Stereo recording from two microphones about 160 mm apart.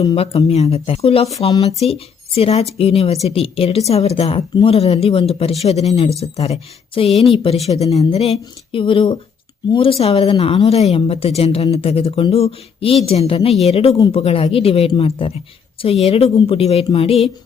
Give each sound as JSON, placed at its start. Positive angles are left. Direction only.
{"t": 0.2, "sound": "speech", "side_deg": 40}